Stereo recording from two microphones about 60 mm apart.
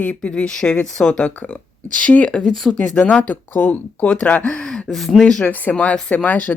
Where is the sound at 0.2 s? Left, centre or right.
Centre.